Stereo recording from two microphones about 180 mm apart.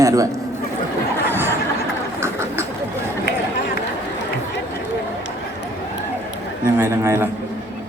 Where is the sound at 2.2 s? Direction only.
15° right (ahead or behind).